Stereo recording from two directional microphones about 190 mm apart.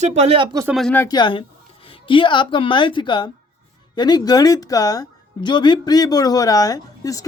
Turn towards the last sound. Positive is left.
turn(degrees=20)  # may be behind; listen again after turning